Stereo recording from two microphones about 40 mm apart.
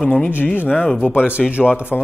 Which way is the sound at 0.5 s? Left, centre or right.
Left.